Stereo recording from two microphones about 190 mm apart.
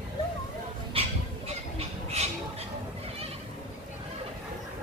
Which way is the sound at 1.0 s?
30° right (ahead or behind).